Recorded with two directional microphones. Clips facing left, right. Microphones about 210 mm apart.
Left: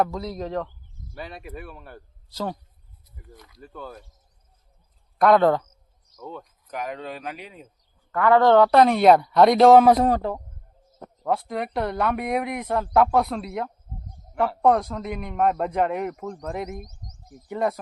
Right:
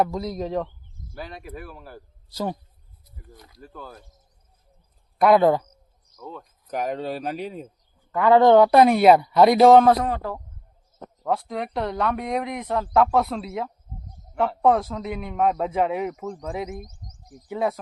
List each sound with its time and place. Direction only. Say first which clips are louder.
0.0 s a man's voice: right 1 dB; 15° right (ahead or behind)
1.1 s speech: even; centre (ahead or behind)
3.3 s speech: left 1 dB; 35° right (ahead or behind)
3.7 s speech: left 3 dB; centre (ahead or behind)
5.2 s a man's voice: right 1 dB; 10° right (ahead or behind)
6.1 s speech: left 1 dB; centre (ahead or behind)
6.7 s speech: right 5 dB; 40° right (ahead or behind)
8.1 s a man's voice: right 2 dB; 20° right (ahead or behind); by 9.8 s centre (ahead or behind)
11.2 s speech: even; centre (ahead or behind)